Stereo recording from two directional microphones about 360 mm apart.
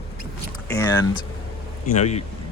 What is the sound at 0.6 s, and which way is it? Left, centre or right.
A man's voice, centre.